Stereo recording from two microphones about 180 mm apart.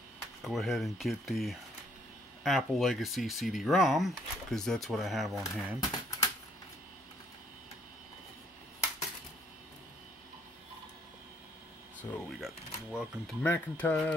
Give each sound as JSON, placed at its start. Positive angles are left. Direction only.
{"t": 0.4, "sound": "speech", "side_deg": 0}
{"t": 6.0, "sound": "typewriter", "side_deg": 20}
{"t": 12.0, "sound": "speech", "side_deg": 0}
{"t": 13.4, "sound": "speech", "side_deg": 10}